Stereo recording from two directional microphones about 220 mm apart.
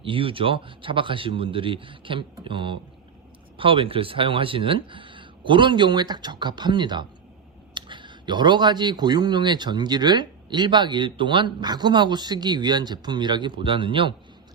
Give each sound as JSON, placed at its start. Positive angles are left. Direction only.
{"t": 0.0, "sound": "a man's voice", "side_deg": -25}